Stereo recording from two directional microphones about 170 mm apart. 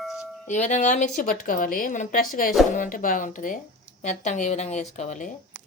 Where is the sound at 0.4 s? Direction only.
45° left (ahead or behind).